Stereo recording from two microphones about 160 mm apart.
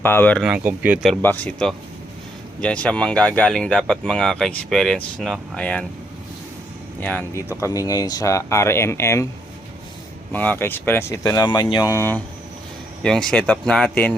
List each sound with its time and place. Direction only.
0.0 s speech: 15° left (ahead or behind)
0.4 s speech: 10° right (ahead or behind)
1.2 s speech: 10° left (ahead or behind)
7.0 s speech: 10° left (ahead or behind)
10.3 s speech: 10° left (ahead or behind)
13.0 s speech: 5° left (ahead or behind)